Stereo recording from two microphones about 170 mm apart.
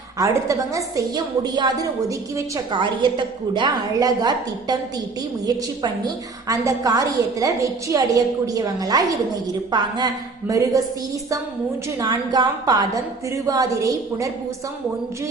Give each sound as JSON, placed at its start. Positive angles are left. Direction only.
{"t": 0.2, "sound": "a woman's voice", "side_deg": -20}
{"t": 6.5, "sound": "a woman's voice", "side_deg": -20}
{"t": 10.5, "sound": "a woman's voice", "side_deg": -20}
{"t": 11.9, "sound": "a woman's voice", "side_deg": -20}